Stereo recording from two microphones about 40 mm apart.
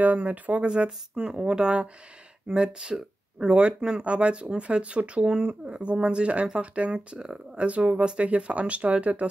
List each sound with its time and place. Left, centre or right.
0.0 s speech: right
0.7 s speech: right